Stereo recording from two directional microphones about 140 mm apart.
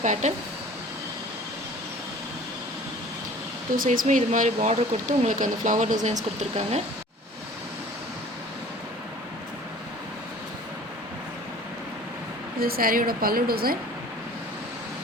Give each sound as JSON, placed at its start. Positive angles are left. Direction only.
{"t": 0.0, "sound": "speech", "side_deg": -55}
{"t": 3.8, "sound": "speech", "side_deg": -70}
{"t": 12.5, "sound": "a woman's voice", "side_deg": -90}